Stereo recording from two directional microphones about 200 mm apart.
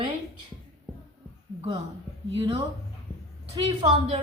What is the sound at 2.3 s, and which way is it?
A woman's voice, 30° right (ahead or behind).